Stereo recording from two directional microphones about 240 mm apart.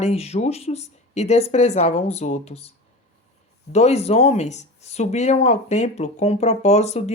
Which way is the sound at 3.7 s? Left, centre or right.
Left.